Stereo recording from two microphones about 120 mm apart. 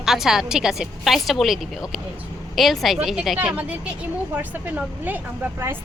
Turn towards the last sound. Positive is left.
turn(degrees=-15)  # may be behind; listen again after turning